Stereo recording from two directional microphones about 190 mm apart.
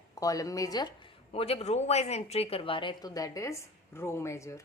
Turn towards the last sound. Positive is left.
turn(degrees=15)  # may be behind; listen again after turning